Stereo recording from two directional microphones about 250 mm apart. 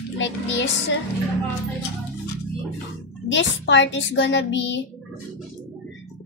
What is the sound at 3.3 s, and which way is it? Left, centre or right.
Music, left.